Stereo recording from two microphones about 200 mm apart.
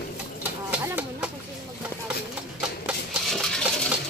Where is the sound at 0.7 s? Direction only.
5° right (ahead or behind).